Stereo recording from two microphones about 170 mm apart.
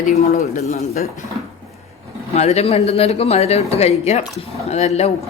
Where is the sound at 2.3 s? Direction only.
40° left (ahead or behind).